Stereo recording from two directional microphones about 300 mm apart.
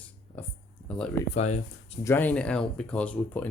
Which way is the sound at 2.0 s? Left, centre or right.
Centre.